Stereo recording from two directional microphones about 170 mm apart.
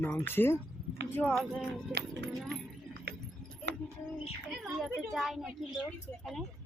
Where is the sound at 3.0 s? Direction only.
65° right (ahead or behind).